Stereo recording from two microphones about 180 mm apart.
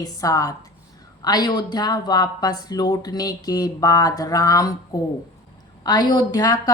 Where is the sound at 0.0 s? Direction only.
20° left (ahead or behind).